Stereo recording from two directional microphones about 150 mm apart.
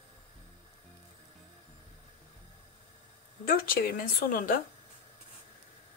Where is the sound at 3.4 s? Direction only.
80° left.